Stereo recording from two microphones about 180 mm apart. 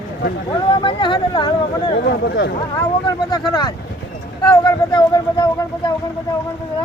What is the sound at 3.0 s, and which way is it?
Speech, 25° left (ahead or behind).